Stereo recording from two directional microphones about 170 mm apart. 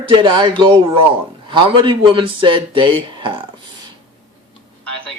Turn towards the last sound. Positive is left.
turn(degrees=-30)  # may be behind; listen again after turning